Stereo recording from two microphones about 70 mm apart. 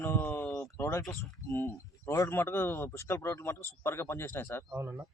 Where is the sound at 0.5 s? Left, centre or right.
Left.